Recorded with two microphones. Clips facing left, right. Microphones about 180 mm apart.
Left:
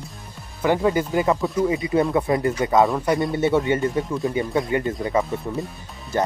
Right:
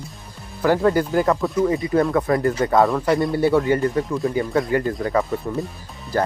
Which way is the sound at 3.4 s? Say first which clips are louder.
Right 2 dB; 20° left (ahead or behind).